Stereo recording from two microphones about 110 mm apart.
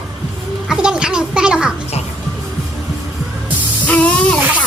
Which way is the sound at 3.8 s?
15° left (ahead or behind).